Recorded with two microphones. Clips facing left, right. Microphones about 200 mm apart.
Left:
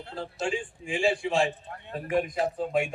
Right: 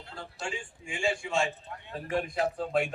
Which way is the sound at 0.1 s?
30° left (ahead or behind).